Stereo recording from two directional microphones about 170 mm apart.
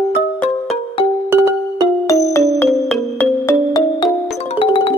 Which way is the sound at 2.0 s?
20° left (ahead or behind).